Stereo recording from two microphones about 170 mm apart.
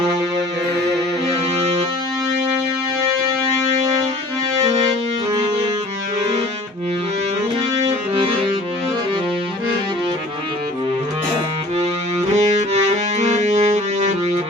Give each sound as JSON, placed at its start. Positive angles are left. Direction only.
{"t": 12.3, "sound": "music", "side_deg": -40}